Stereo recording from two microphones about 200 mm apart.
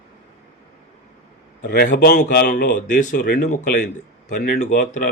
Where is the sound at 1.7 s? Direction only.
50° left (ahead or behind).